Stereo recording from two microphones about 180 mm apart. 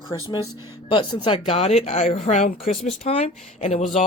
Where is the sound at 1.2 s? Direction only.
30° left (ahead or behind).